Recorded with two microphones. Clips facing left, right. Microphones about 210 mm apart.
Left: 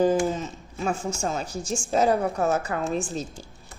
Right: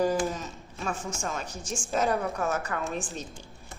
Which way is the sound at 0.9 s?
30° left (ahead or behind).